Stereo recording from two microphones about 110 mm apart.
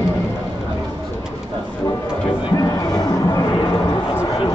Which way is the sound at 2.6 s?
35° left (ahead or behind).